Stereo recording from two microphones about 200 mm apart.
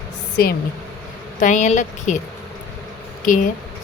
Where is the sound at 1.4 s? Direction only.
40° left (ahead or behind).